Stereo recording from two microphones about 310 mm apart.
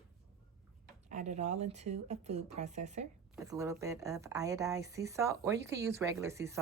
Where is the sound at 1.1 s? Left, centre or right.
Right.